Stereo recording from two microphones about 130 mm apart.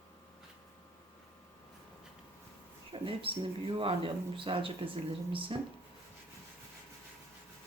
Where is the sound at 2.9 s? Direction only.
45° right (ahead or behind).